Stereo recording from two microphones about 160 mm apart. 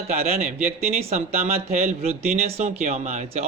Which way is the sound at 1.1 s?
40° right (ahead or behind).